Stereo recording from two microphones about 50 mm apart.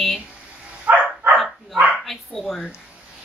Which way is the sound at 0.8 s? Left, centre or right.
Right.